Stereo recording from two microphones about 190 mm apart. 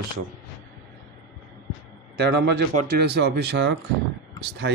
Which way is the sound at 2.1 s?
60° right (ahead or behind).